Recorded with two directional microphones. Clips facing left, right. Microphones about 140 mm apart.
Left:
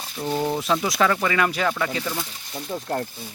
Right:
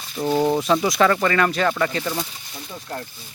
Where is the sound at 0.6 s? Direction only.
Centre (ahead or behind).